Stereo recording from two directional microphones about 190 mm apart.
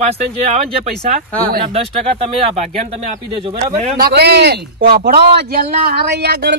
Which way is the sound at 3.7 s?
35° right (ahead or behind).